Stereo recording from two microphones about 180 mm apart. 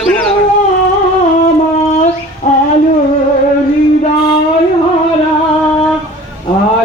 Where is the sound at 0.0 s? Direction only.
5° left (ahead or behind).